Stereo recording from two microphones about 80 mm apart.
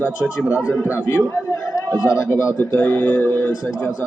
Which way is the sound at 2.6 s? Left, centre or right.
Left.